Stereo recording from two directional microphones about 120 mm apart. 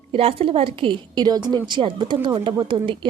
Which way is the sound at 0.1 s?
50° right (ahead or behind).